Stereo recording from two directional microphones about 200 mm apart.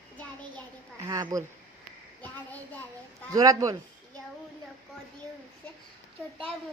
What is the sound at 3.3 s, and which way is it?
Speech, 15° right (ahead or behind).